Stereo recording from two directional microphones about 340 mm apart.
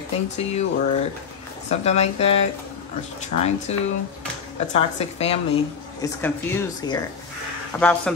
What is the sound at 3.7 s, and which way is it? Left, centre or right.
Speech, centre.